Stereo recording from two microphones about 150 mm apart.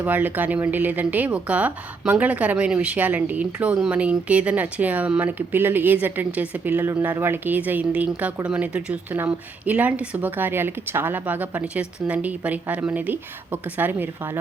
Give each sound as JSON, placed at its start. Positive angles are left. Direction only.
{"t": 0.0, "sound": "speech", "side_deg": -10}